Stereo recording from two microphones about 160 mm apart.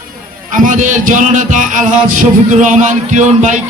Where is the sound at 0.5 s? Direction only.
55° right (ahead or behind).